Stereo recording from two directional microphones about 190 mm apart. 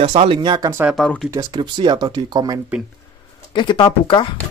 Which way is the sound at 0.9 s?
Centre (ahead or behind).